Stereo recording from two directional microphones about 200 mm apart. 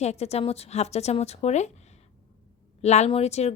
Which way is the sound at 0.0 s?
35° left (ahead or behind).